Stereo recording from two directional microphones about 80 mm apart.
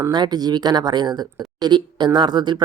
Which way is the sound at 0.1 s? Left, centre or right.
Right.